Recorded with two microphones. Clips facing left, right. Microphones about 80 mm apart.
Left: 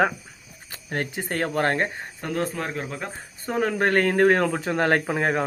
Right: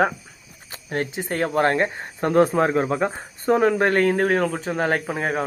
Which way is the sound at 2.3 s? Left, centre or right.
Right.